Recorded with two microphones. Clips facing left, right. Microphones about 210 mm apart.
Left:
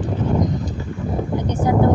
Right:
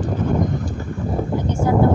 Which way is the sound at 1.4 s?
15° left (ahead or behind).